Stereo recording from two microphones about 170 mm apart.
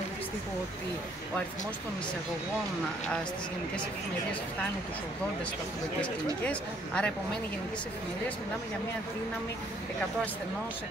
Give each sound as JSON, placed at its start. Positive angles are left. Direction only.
{"t": 6.4, "sound": "speech", "side_deg": 10}